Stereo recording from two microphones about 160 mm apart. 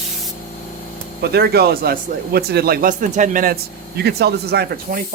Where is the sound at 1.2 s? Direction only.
90° right.